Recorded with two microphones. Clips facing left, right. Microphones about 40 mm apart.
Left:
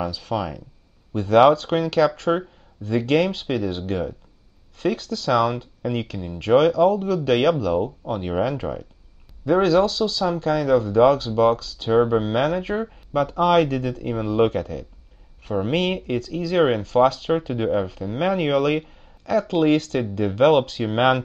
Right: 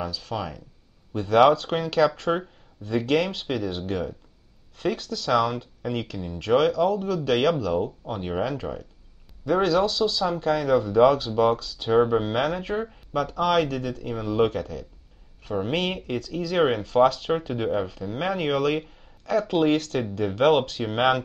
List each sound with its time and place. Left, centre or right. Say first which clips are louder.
0.1 s speech: left 5 dB; centre
9.6 s speech: left 3 dB; centre